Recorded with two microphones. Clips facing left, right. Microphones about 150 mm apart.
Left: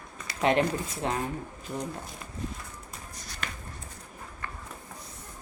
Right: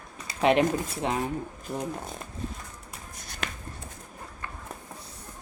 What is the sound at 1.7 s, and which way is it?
Speech, 10° right (ahead or behind).